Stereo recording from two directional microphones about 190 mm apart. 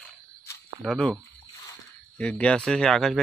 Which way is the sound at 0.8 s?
5° left (ahead or behind).